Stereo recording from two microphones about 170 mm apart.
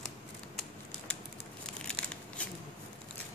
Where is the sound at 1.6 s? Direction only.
5° left (ahead or behind).